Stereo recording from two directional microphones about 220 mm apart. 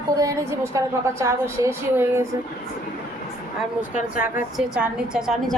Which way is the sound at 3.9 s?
35° left (ahead or behind).